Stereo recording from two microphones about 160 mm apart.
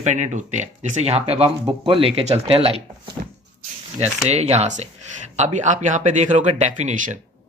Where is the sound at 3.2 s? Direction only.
60° right (ahead or behind).